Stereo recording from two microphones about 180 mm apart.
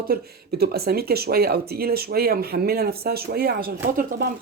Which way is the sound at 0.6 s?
60° right (ahead or behind).